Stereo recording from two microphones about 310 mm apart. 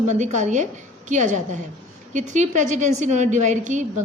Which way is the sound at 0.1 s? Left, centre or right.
Right.